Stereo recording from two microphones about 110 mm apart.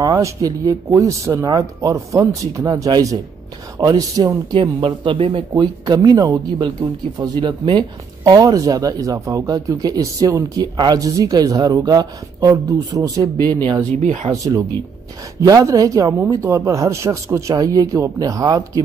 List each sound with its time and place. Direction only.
0.0 s speech: 30° right (ahead or behind)
4.6 s speech: 50° right (ahead or behind); by 13.6 s 30° right (ahead or behind)
13.9 s speech: 90° right
14.3 s speech: 30° right (ahead or behind)